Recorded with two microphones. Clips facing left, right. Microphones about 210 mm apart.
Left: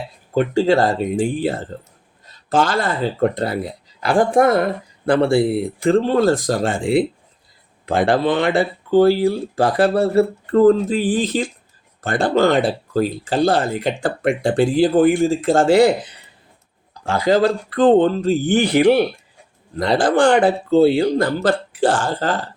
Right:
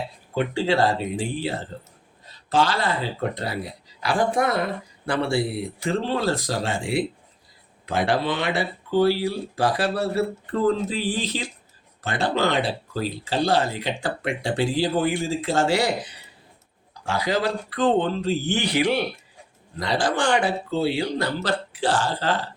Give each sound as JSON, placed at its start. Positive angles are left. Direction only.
{"t": 0.3, "sound": "speech", "side_deg": 45}
{"t": 17.1, "sound": "speech", "side_deg": 50}